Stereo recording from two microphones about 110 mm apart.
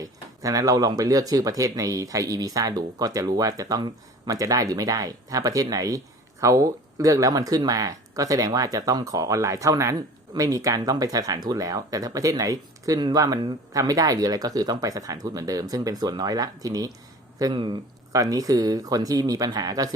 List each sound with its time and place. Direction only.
0.0 s speech: 30° right (ahead or behind)
18.1 s speech: 30° right (ahead or behind)